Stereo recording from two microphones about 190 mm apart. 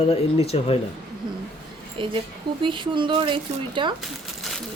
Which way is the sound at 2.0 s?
25° right (ahead or behind).